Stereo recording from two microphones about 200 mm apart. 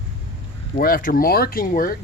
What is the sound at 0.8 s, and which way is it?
Speech, 45° left (ahead or behind).